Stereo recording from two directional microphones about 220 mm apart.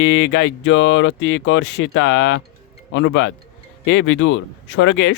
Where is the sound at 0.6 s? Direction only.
60° left (ahead or behind).